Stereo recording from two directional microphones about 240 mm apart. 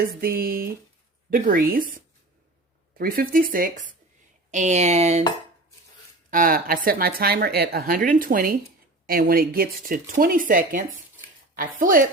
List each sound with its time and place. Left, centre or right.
0.0 s speech: right
3.0 s speech: right
6.3 s speech: right